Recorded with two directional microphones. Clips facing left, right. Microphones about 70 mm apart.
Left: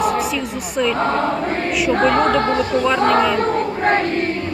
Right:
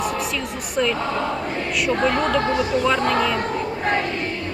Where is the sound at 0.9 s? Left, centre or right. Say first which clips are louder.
Left 5 dB; left.